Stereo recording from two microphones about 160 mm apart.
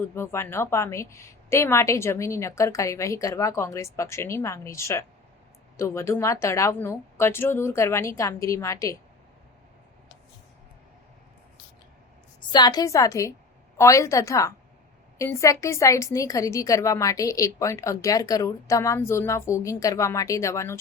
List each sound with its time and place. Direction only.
0.1 s a woman's voice: 15° left (ahead or behind)
12.5 s a woman's voice: 25° left (ahead or behind)